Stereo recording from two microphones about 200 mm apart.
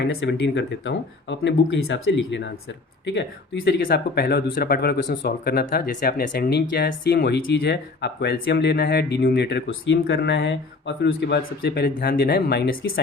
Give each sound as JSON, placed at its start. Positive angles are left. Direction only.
{"t": 0.1, "sound": "speech", "side_deg": 65}